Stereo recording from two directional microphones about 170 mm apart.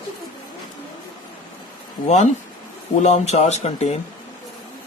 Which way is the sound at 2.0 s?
45° left (ahead or behind).